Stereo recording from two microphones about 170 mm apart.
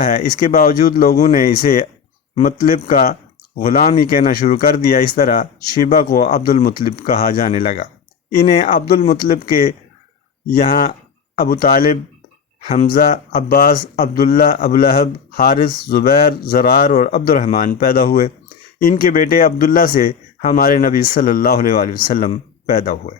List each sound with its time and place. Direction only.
0.0 s speech: 50° left (ahead or behind)